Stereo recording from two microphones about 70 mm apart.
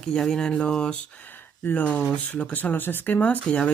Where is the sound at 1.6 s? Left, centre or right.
Left.